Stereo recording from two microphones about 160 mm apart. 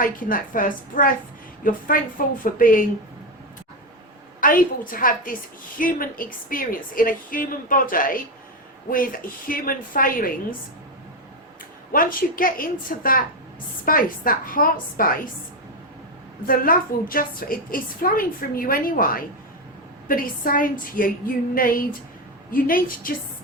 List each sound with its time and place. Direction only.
0.0 s a woman's voice: 60° left (ahead or behind)
4.4 s a woman's voice: 60° left (ahead or behind)
11.9 s a woman's voice: 60° left (ahead or behind)
16.5 s a woman's voice: 65° left (ahead or behind)